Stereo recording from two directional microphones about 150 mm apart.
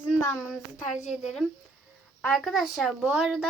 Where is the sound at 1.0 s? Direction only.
Centre (ahead or behind).